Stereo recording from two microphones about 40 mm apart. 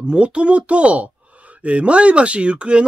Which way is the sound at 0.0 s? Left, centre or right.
Right.